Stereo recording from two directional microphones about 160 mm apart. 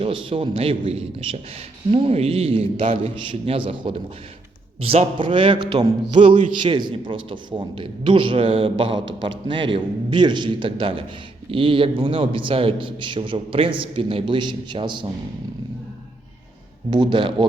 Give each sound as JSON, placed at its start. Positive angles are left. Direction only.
{"t": 0.0, "sound": "a man's voice", "side_deg": -35}
{"t": 16.9, "sound": "speech", "side_deg": -30}